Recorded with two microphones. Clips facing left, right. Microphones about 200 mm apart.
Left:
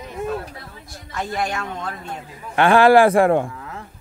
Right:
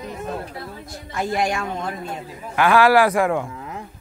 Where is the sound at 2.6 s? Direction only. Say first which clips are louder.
Left 3 dB; 30° left (ahead or behind).